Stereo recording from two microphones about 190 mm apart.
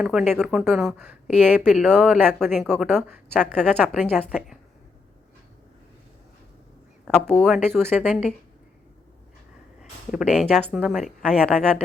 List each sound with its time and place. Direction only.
0.0 s speech: 5° right (ahead or behind)
1.9 s speech: 10° right (ahead or behind)
7.1 s speech: 5° left (ahead or behind)
10.1 s speech: 5° right (ahead or behind)